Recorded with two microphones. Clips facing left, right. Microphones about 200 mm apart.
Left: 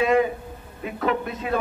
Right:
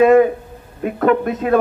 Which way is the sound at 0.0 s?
50° right (ahead or behind).